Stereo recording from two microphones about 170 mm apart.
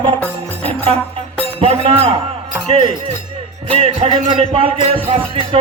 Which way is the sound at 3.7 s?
35° right (ahead or behind).